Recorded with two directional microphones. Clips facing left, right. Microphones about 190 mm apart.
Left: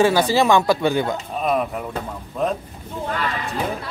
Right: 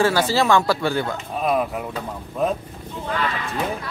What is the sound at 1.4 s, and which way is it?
Speech, centre (ahead or behind).